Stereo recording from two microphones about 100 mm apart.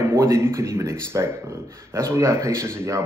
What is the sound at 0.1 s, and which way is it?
A man's voice, 30° right (ahead or behind).